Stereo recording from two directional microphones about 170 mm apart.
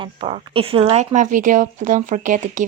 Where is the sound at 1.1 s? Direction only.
50° right (ahead or behind).